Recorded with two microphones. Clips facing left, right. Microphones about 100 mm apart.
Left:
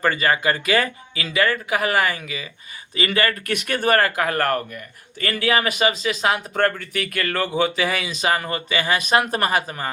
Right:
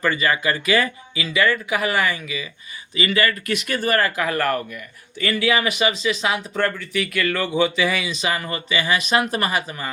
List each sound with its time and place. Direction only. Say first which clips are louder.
0.0 s speech: left 1 dB; 40° left (ahead or behind)